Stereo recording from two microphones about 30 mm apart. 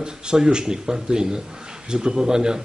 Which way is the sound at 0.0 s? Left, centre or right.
Right.